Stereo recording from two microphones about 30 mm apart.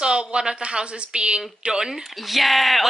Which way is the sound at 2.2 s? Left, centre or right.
Centre.